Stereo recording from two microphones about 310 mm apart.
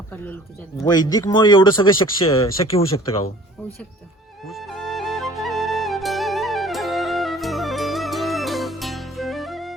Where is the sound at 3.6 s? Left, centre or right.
Centre.